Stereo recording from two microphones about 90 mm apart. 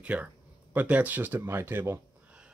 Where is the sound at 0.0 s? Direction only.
15° right (ahead or behind).